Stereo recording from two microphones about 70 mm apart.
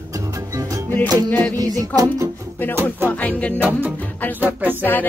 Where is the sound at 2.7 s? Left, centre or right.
Right.